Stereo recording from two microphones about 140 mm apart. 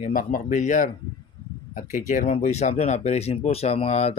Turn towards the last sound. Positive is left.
turn(degrees=50)  # may be behind; listen again after turning